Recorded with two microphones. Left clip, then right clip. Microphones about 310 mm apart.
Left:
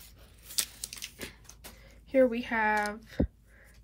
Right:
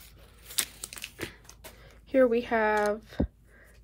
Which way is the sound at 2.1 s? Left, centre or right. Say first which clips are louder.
Right 2 dB; centre.